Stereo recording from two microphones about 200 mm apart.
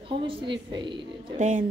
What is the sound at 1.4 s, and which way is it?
Speech, 35° right (ahead or behind).